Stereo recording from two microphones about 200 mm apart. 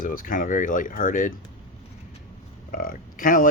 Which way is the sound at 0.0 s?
45° left (ahead or behind).